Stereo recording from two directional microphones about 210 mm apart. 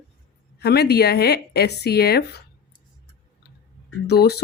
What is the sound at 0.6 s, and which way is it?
A woman's voice, 50° left (ahead or behind).